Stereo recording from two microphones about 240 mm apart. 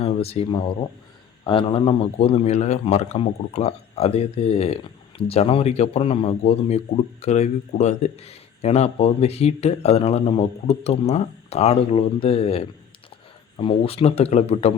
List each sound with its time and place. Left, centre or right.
0.0 s a man's voice: left